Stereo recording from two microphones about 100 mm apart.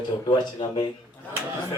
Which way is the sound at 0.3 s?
55° left (ahead or behind).